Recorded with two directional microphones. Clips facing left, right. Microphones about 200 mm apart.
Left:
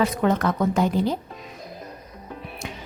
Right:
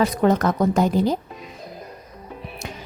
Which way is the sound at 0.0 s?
40° right (ahead or behind).